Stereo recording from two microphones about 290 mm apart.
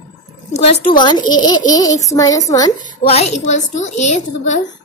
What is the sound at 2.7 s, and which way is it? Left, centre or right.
A woman's voice, left.